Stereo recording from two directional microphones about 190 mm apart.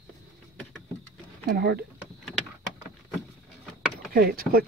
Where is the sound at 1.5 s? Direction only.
55° right (ahead or behind).